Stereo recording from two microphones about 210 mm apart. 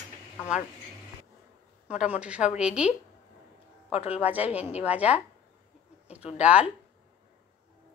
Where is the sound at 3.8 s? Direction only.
30° left (ahead or behind).